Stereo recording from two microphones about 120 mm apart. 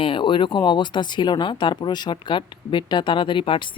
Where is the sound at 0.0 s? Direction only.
45° left (ahead or behind).